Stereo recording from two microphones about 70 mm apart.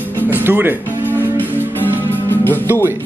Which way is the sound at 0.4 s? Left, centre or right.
Right.